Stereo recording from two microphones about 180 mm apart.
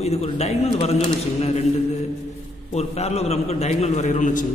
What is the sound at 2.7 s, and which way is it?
A man's voice, 35° left (ahead or behind).